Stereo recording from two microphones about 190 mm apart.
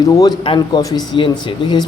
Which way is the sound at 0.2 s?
25° left (ahead or behind).